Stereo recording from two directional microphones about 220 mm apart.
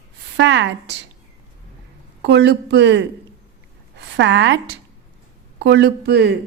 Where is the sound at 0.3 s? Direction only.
55° right (ahead or behind).